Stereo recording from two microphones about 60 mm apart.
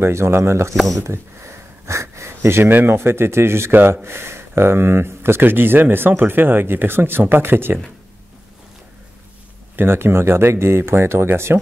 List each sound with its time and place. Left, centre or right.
0.0 s speech: right
0.7 s speech: centre
1.0 s sniff: right
2.7 s speech: right
9.8 s speech: right